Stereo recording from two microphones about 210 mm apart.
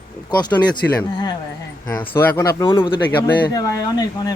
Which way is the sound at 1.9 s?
10° left (ahead or behind).